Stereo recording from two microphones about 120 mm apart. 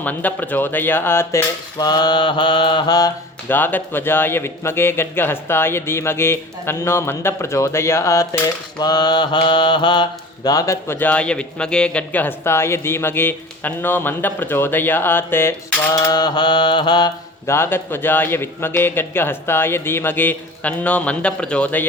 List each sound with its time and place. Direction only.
0.0 s speech: 15° left (ahead or behind)
1.8 s mantra: 35° left (ahead or behind)
3.5 s a man's voice: 15° left (ahead or behind)
8.8 s mantra: 35° left (ahead or behind)
10.8 s speech: 15° left (ahead or behind)
16.0 s mantra: 35° left (ahead or behind)
17.4 s a man's voice: 20° left (ahead or behind)